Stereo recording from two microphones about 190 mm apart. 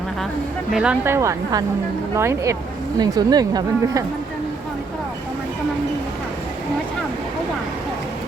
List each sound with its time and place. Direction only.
0.7 s speech: 5° right (ahead or behind)